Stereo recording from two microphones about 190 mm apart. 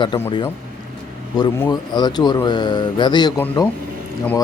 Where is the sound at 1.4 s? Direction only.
15° left (ahead or behind).